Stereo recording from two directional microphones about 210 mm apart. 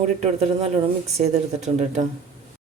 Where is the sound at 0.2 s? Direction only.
30° right (ahead or behind).